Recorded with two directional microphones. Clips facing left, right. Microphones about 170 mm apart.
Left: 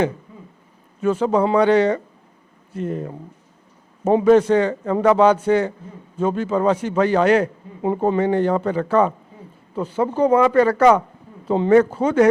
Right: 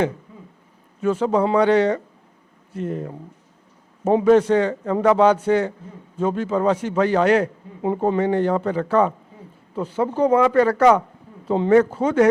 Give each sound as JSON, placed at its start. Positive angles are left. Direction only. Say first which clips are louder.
{"t": 1.0, "sound": "a man's voice", "louder": "left 1 dB", "side_deg": 15}
{"t": 10.2, "sound": "a man's voice", "louder": "left 1 dB", "side_deg": 15}